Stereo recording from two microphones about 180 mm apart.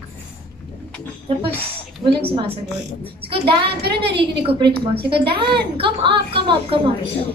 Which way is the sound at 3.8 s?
65° right (ahead or behind).